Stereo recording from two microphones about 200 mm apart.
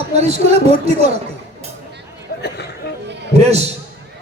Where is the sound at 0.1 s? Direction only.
30° right (ahead or behind).